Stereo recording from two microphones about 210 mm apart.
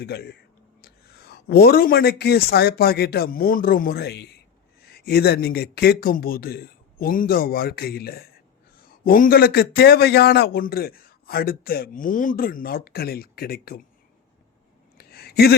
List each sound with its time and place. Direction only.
0.0 s a man's voice: 50° left (ahead or behind)
1.5 s a man's voice: 45° left (ahead or behind)
14.9 s a sound: 45° left (ahead or behind)